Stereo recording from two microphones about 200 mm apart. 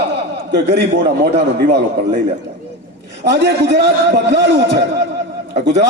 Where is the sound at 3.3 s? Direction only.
60° right (ahead or behind).